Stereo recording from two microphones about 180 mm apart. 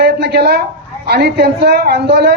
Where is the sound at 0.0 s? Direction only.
65° right (ahead or behind).